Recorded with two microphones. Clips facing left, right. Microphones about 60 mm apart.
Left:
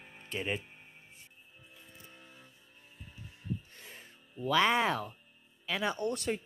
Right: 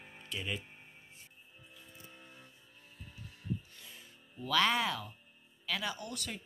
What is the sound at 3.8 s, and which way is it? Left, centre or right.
Music, left.